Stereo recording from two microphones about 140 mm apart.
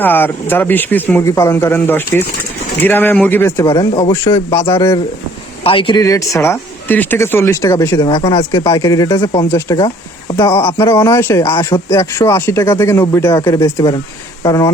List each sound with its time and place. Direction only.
0.0 s speech: 15° left (ahead or behind)
5.6 s speech: 40° left (ahead or behind)
6.0 s speech: 25° left (ahead or behind)
8.3 s speech: 30° left (ahead or behind)